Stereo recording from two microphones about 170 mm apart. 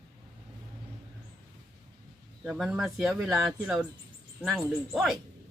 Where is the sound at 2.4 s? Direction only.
5° right (ahead or behind).